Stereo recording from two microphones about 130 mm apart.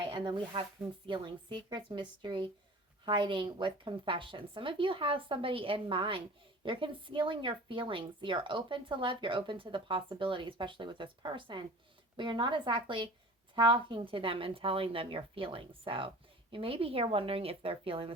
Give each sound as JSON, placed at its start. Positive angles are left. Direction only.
{"t": 0.0, "sound": "a woman's voice", "side_deg": -40}